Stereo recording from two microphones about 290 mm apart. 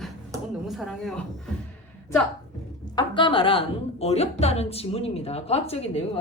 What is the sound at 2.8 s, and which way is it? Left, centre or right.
A woman's voice, centre.